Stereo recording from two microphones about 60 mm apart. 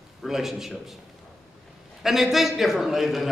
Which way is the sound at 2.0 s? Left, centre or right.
Centre.